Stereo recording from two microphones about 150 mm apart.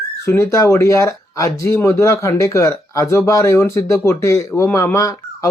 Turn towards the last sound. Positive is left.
turn(degrees=20)  # may be behind; listen again after turning